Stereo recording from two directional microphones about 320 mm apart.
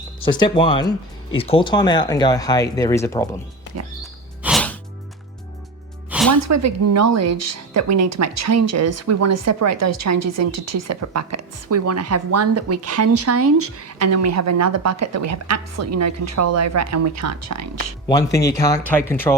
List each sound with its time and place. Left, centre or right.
0.2 s speech: centre
4.0 s music: centre
6.1 s music: centre
6.4 s speech: right
18.1 s speech: centre